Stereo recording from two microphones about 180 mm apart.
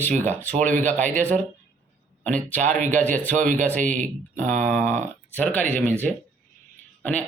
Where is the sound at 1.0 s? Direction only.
45° right (ahead or behind).